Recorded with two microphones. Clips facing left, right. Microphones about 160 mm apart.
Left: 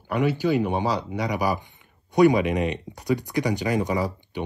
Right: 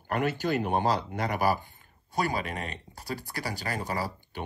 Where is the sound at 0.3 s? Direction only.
10° left (ahead or behind).